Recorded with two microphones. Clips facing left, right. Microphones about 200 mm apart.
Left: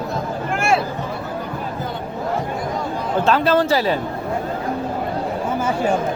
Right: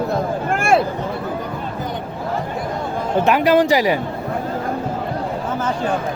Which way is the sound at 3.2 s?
15° right (ahead or behind).